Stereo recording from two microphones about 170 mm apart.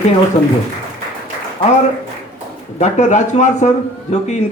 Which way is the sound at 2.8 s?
45° left (ahead or behind).